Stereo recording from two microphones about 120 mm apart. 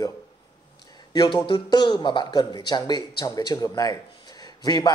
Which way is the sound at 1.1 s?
35° left (ahead or behind).